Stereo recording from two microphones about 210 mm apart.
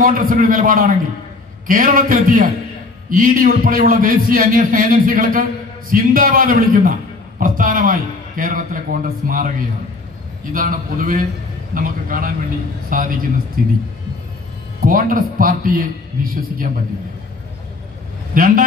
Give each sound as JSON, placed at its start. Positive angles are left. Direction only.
{"t": 0.0, "sound": "a man's voice", "side_deg": -45}
{"t": 10.5, "sound": "a man's voice", "side_deg": -40}
{"t": 14.8, "sound": "a man's voice", "side_deg": -40}
{"t": 18.3, "sound": "speech", "side_deg": -40}